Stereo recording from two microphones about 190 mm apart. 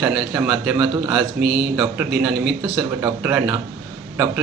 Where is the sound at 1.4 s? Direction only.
60° right (ahead or behind).